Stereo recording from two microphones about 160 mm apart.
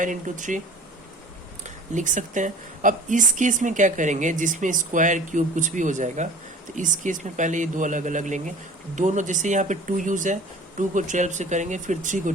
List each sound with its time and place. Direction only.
0.0 s a woman's voice: 55° right (ahead or behind)
1.6 s a woman's voice: 50° right (ahead or behind)